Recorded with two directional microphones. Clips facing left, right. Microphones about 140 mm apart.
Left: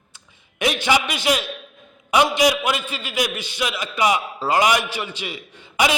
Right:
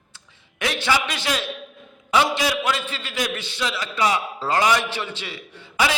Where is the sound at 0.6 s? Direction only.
15° left (ahead or behind).